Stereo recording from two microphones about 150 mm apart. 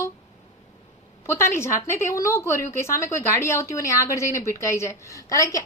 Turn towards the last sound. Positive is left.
turn(degrees=20)  # may be behind; listen again after turning